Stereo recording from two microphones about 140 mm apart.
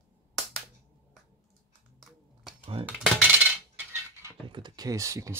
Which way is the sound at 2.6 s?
40° right (ahead or behind).